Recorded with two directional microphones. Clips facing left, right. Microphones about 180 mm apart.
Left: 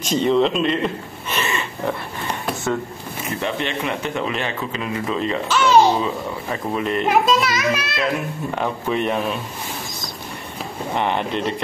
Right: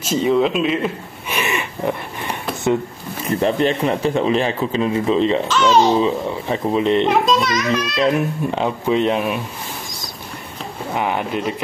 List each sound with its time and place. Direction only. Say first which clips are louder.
0.0 s speech: right 1 dB; 5° right (ahead or behind)
1.4 s a sound: right 3 dB; 15° right (ahead or behind)
3.3 s speech: right 8 dB; 40° right (ahead or behind)
5.5 s speech: left 3 dB; 10° left (ahead or behind)
6.0 s speech: right 5 dB; 25° right (ahead or behind)
7.1 s a child's voice: right 1 dB; 5° left (ahead or behind)
8.5 s speech: right 4 dB; 15° right (ahead or behind)
11.0 s a child's voice: right 1 dB; 5° right (ahead or behind)